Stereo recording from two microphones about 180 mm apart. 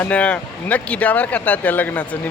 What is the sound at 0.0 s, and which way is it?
Speech, 5° left (ahead or behind).